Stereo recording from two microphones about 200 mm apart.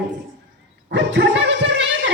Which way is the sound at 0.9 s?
60° right (ahead or behind).